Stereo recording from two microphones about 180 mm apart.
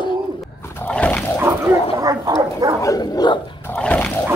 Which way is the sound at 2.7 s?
20° left (ahead or behind).